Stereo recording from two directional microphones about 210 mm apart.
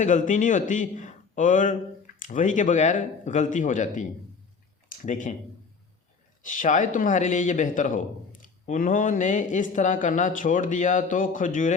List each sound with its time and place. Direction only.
0.0 s a man's voice: 35° left (ahead or behind)
6.4 s speech: 40° left (ahead or behind)